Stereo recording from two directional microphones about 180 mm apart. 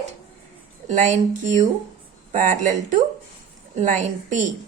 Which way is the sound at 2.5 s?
45° right (ahead or behind).